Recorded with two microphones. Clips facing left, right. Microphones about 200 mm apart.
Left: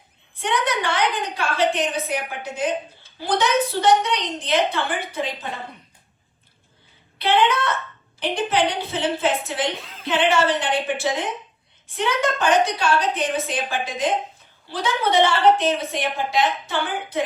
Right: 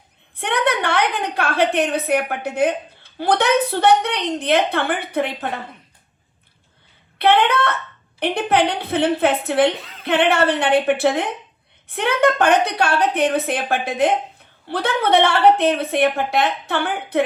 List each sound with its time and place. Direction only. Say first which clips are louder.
0.3 s a woman's voice: right 3 dB; 60° right (ahead or behind)
7.2 s a woman's voice: right 3 dB; 60° right (ahead or behind)
9.7 s music: right 1 dB; centre (ahead or behind)
10.0 s a woman's voice: right 3 dB; 60° right (ahead or behind)